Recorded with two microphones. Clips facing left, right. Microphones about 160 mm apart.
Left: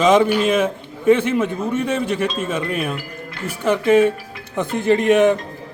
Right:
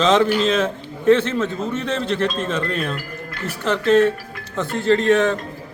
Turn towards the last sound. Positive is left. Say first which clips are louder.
# left 2 dB
turn(degrees=15)  # may be behind; listen again after turning